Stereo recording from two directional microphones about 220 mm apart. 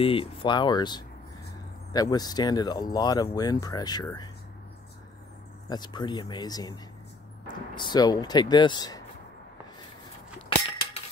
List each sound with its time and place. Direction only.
0.0 s speech: 25° left (ahead or behind)
5.7 s speech: 20° left (ahead or behind)